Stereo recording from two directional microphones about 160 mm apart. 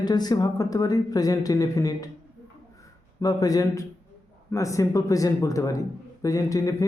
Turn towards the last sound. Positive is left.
turn(degrees=20)  # may be behind; listen again after turning